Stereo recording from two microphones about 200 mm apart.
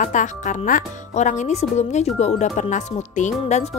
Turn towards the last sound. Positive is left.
turn(degrees=35)  # may be behind; listen again after turning